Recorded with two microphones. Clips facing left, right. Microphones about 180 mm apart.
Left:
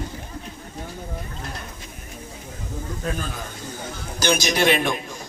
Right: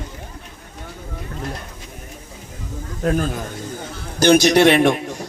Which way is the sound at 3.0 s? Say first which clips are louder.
Right 11 dB; 55° right (ahead or behind).